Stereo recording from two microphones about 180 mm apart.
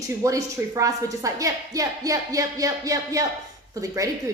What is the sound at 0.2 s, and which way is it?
A woman's voice, 15° right (ahead or behind).